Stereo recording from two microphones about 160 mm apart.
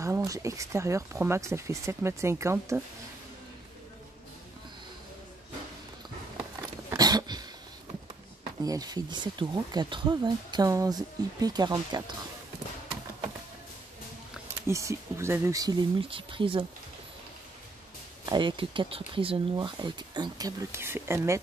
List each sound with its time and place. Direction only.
0.0 s speech: 20° right (ahead or behind)
6.9 s a sound: 25° right (ahead or behind)
8.6 s speech: 25° right (ahead or behind)
14.7 s speech: 20° right (ahead or behind)
16.0 s speech: 35° right (ahead or behind)
18.2 s speech: 30° right (ahead or behind)